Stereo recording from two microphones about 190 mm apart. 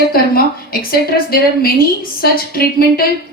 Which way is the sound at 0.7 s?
50° left (ahead or behind).